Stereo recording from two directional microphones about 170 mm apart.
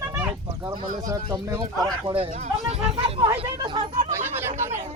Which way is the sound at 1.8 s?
30° right (ahead or behind).